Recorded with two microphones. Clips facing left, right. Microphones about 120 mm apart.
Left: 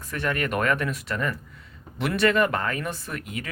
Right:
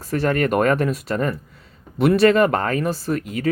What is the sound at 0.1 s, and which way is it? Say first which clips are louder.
Speech: right 8 dB; 35° right (ahead or behind).